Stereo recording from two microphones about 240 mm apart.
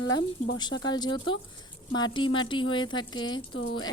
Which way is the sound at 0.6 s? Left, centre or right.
Centre.